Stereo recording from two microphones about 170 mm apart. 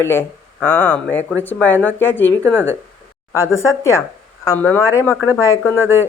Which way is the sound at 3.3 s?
15° left (ahead or behind).